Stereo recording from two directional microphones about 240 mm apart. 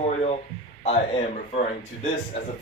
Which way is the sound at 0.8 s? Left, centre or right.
Left.